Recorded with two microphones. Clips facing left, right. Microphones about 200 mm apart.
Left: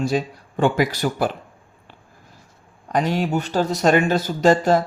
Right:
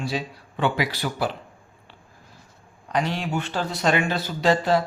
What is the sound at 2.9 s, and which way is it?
Speech, 45° left (ahead or behind).